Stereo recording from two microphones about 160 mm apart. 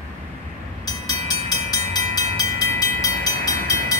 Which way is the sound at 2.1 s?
20° left (ahead or behind).